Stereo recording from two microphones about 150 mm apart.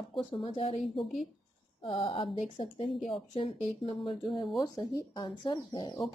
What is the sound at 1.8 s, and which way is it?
A woman's voice, 40° left (ahead or behind).